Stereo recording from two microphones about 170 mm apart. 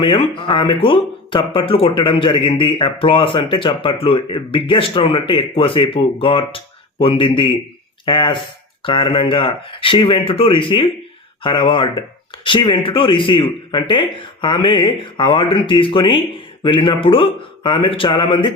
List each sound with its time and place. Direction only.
0.0 s speech: 30° left (ahead or behind)